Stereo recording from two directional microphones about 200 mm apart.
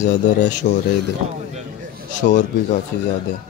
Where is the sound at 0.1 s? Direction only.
40° left (ahead or behind).